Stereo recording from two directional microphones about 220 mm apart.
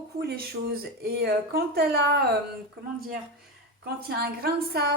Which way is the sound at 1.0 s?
45° right (ahead or behind).